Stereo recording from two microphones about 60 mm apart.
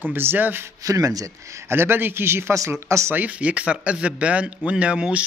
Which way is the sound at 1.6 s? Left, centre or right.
Right.